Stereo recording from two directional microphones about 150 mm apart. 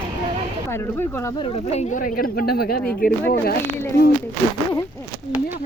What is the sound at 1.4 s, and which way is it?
Speech, 45° left (ahead or behind).